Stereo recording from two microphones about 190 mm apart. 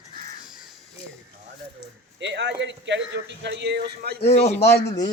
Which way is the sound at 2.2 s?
65° right (ahead or behind).